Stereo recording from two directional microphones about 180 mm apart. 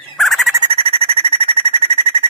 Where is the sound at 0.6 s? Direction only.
30° right (ahead or behind).